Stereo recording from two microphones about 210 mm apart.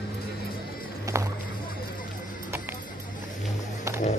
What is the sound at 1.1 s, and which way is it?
Music, 15° right (ahead or behind).